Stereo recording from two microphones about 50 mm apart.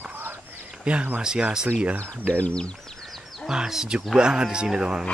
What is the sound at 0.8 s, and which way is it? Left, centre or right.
Speech, right.